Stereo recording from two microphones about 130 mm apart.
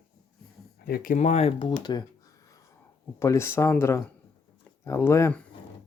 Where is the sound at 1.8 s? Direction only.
35° left (ahead or behind).